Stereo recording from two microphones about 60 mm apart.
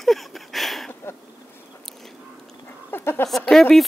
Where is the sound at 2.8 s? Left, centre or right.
Left.